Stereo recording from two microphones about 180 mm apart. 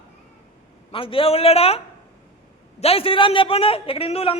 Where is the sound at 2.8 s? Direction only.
30° left (ahead or behind).